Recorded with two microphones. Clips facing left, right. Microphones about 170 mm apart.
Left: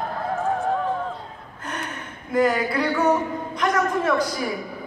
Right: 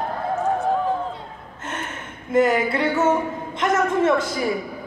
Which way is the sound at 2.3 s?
25° right (ahead or behind).